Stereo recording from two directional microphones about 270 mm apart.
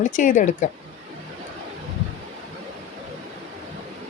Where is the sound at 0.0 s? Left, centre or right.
Left.